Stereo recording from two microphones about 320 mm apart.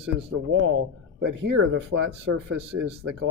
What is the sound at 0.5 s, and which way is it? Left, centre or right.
Speech, right.